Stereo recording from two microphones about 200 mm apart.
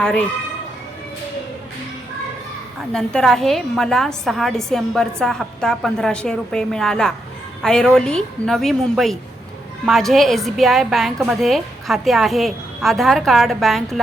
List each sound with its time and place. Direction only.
0.0 s a woman's voice: 5° left (ahead or behind)
2.9 s a woman's voice: 5° left (ahead or behind)